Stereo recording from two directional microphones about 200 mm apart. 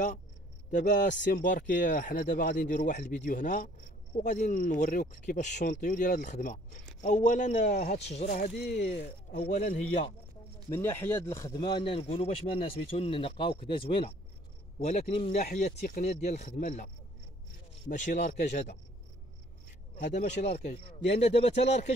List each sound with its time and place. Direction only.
0.7 s speech: 40° left (ahead or behind)
8.4 s speech: 55° left (ahead or behind)
9.3 s speech: 40° left (ahead or behind)
10.7 s speech: 10° left (ahead or behind); by 18.3 s 40° left (ahead or behind)
20.0 s speech: 40° left (ahead or behind)
20.3 s speech: 55° left (ahead or behind)
20.7 s speech: 30° left (ahead or behind)